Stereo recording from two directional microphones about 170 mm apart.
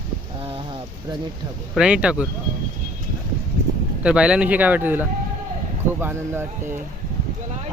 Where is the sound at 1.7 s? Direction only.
5° right (ahead or behind).